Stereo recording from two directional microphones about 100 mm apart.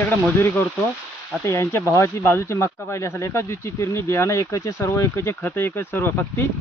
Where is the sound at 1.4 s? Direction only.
30° left (ahead or behind).